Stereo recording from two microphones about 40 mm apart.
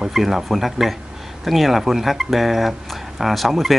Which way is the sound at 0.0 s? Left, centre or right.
Centre.